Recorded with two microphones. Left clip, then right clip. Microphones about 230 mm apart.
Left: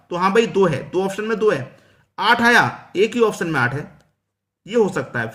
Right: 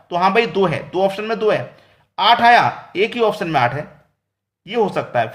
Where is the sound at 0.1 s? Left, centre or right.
Left.